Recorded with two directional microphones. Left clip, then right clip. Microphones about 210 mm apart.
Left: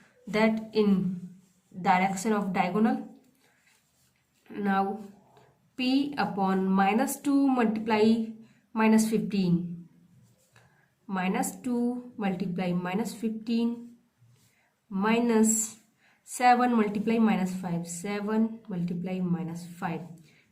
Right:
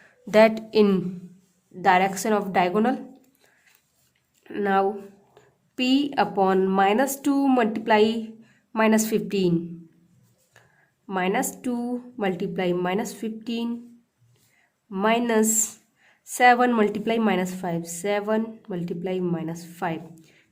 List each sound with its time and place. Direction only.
0.3 s a woman's voice: 55° right (ahead or behind)
4.4 s a woman's voice: 45° right (ahead or behind)
11.0 s a woman's voice: 45° right (ahead or behind)
14.8 s a woman's voice: 45° right (ahead or behind)